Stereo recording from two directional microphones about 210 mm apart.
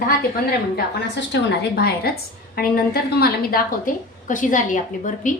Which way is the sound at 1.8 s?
45° left (ahead or behind).